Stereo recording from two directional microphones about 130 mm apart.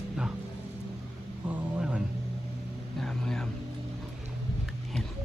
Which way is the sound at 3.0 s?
5° left (ahead or behind).